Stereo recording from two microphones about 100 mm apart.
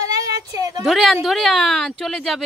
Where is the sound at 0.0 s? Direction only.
35° right (ahead or behind).